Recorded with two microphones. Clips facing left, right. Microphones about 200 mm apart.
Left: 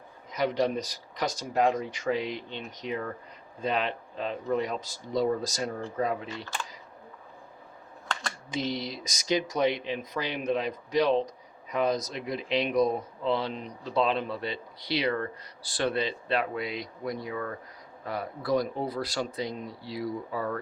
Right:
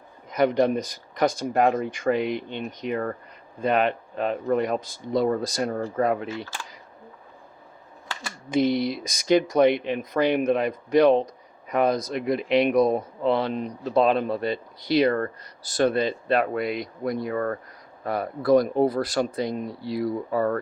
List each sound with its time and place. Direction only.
0.3 s speech: 55° right (ahead or behind)
6.2 s speech: 5° right (ahead or behind)
8.4 s speech: 55° right (ahead or behind)